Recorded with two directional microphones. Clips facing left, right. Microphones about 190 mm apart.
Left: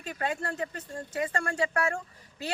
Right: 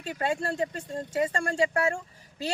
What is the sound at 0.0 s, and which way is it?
Speech, 30° right (ahead or behind).